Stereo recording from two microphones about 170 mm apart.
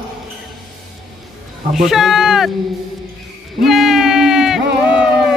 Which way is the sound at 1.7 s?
Centre (ahead or behind).